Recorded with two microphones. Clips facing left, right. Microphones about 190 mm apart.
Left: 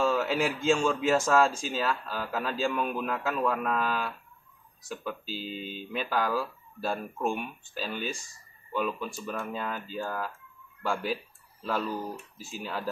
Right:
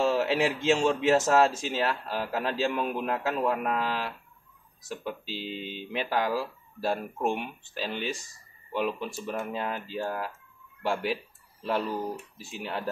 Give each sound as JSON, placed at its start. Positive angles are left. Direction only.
{"t": 0.0, "sound": "a man's voice", "side_deg": -25}
{"t": 11.6, "sound": "a man's voice", "side_deg": -25}